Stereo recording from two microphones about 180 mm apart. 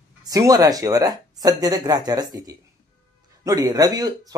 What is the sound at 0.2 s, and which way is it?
Speech, 20° right (ahead or behind).